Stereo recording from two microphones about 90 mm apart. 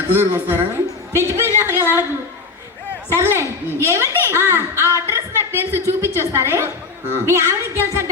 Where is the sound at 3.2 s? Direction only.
25° right (ahead or behind).